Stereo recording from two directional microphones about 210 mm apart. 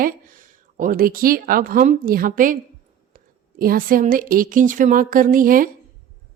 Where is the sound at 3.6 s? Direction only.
45° right (ahead or behind).